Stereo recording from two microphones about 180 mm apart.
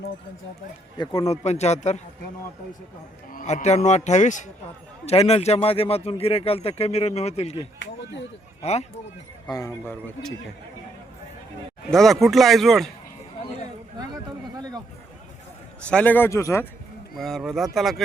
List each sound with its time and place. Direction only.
0.9 s speech: 30° left (ahead or behind)
3.3 s speech: 40° left (ahead or behind)
7.8 s speech: 90° left
8.6 s speech: 35° left (ahead or behind)
9.5 s a man's voice: 15° left (ahead or behind)
11.9 s speech: centre (ahead or behind)
15.9 s a man's voice: 10° left (ahead or behind)
17.2 s speech: centre (ahead or behind)